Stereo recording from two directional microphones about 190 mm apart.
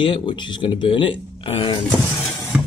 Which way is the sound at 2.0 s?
15° left (ahead or behind).